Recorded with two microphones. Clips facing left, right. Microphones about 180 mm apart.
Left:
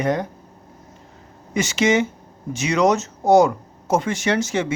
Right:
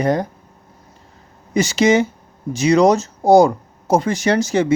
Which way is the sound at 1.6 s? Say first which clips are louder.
Right 4 dB; 35° right (ahead or behind).